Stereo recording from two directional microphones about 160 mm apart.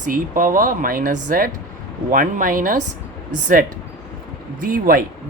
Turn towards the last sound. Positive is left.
turn(degrees=-60)  # may be behind; listen again after turning